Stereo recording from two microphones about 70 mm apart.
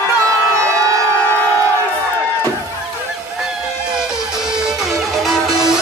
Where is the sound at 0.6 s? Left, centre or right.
Right.